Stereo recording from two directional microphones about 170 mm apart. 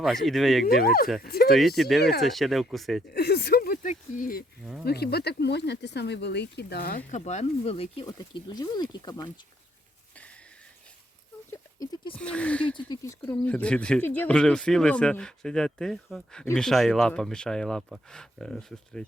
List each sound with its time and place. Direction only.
0.0 s speech: centre (ahead or behind)
0.6 s speech: 60° left (ahead or behind)
1.5 s speech: centre (ahead or behind)
2.0 s speech: 70° left (ahead or behind)
2.2 s speech: centre (ahead or behind)
3.1 s speech: 70° left (ahead or behind); by 4.4 s 55° left (ahead or behind)
4.9 s speech: 70° left (ahead or behind)
7.1 s speech: 45° left (ahead or behind); by 9.3 s 25° left (ahead or behind)
11.5 s sheep: 20° left (ahead or behind)
12.1 s speech: 5° left (ahead or behind)
12.7 s speech: 20° left (ahead or behind)
13.4 s speech: 5° left (ahead or behind)